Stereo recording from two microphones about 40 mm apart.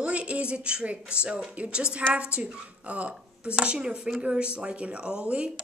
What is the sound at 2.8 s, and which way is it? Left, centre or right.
Speech, right.